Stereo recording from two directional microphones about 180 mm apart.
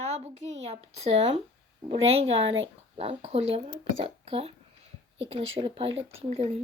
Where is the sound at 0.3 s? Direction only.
40° right (ahead or behind).